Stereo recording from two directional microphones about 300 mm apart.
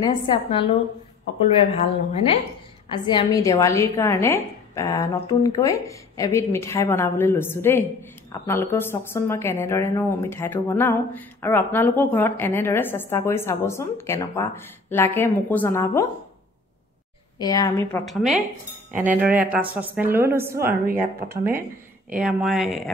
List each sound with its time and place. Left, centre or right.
0.0 s a woman's voice: centre
17.4 s a woman's voice: centre
21.2 s speech: right
22.1 s a woman's voice: centre